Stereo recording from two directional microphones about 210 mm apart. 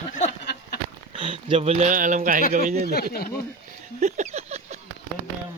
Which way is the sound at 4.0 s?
35° right (ahead or behind).